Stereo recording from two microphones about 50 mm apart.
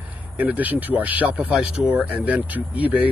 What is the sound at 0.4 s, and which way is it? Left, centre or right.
Speech, right.